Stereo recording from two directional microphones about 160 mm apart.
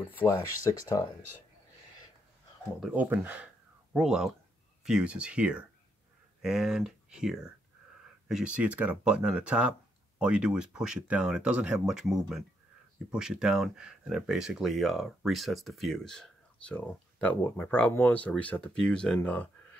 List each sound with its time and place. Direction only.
0.2 s speech: 15° left (ahead or behind)
2.8 s speech: 10° right (ahead or behind); by 19.5 s 10° left (ahead or behind)